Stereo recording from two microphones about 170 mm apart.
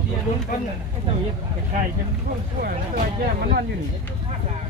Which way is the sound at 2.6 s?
55° right (ahead or behind).